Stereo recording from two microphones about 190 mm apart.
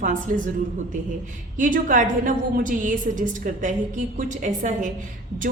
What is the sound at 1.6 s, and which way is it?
A woman's voice, 45° right (ahead or behind).